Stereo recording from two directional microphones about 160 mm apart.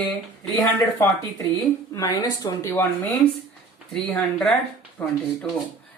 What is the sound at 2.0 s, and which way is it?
Speech, 25° left (ahead or behind).